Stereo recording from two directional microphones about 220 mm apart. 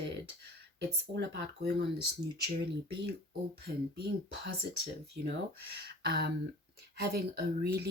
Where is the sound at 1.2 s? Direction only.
55° right (ahead or behind).